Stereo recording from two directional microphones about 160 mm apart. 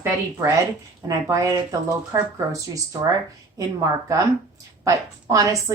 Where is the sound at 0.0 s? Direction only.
20° right (ahead or behind).